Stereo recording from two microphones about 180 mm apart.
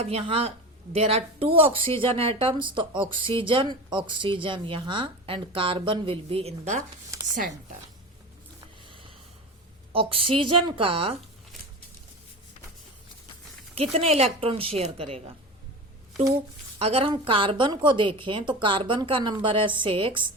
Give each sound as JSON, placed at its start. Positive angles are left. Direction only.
{"t": 0.0, "sound": "a woman's voice", "side_deg": -35}
{"t": 9.9, "sound": "a woman's voice", "side_deg": -30}
{"t": 13.9, "sound": "a woman's voice", "side_deg": -35}
{"t": 16.7, "sound": "speech", "side_deg": -30}